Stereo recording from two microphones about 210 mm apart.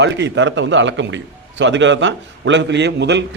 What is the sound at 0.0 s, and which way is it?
A man's voice, 60° right (ahead or behind).